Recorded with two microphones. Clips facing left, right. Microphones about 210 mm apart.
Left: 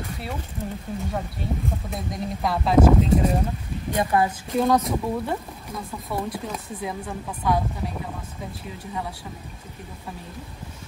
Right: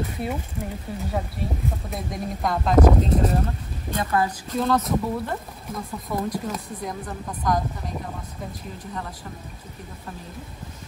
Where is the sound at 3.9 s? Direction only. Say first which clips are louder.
Left 2 dB; 20° left (ahead or behind).